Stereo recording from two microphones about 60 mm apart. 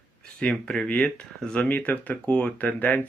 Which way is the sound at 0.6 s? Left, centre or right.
Centre.